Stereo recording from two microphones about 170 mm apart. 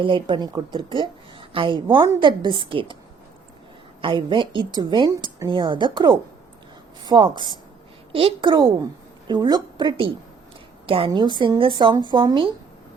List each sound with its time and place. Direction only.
0.0 s a woman's voice: 30° right (ahead or behind)
4.0 s a woman's voice: 30° right (ahead or behind)